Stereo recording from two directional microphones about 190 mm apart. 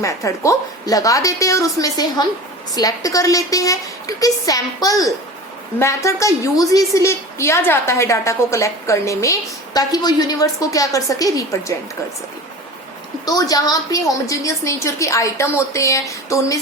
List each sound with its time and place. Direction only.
0.0 s a woman's voice: 15° left (ahead or behind)
13.2 s a woman's voice: 20° left (ahead or behind)